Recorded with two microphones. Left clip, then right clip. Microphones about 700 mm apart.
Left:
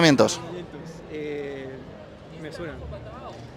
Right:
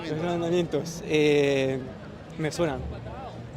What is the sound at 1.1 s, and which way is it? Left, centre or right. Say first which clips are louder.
Speech: right 11 dB; right.